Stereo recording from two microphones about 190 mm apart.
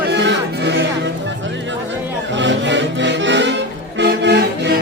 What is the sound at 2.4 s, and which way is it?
Music, 70° right (ahead or behind).